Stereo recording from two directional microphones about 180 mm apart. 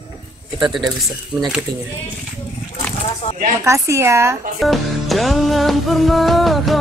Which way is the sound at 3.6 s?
15° right (ahead or behind).